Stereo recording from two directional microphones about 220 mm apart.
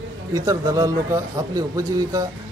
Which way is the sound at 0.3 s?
15° right (ahead or behind).